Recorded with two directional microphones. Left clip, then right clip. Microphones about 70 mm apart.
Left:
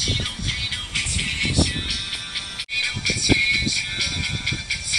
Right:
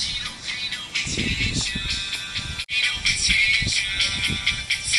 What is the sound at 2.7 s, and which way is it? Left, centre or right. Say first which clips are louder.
Music: right 2 dB; right.